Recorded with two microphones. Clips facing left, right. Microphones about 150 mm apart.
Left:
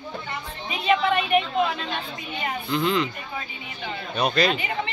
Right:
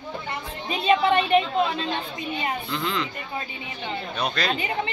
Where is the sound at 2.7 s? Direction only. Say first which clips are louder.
Left 9 dB; 15° left (ahead or behind).